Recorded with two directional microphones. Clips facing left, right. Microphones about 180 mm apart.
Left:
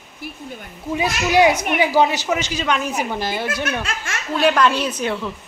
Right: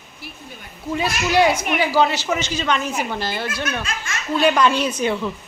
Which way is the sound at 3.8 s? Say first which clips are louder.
Left 1 dB; 65° left (ahead or behind).